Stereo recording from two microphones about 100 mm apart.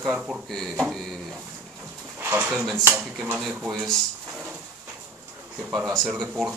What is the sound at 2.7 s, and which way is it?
Speech, 25° right (ahead or behind).